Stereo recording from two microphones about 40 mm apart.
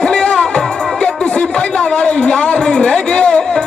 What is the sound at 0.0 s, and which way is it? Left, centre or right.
Music, centre.